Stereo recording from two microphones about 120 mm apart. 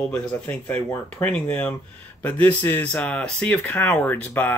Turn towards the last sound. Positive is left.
turn(degrees=15)  # may be behind; listen again after turning